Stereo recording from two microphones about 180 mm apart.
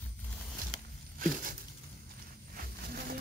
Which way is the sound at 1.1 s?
50° right (ahead or behind).